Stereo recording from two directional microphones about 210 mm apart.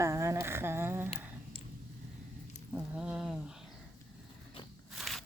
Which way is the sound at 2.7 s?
5° right (ahead or behind).